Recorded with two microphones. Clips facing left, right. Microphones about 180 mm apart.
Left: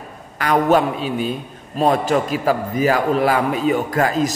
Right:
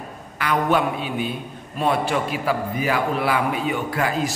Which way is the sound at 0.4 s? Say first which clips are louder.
Left 5 dB; 45° left (ahead or behind).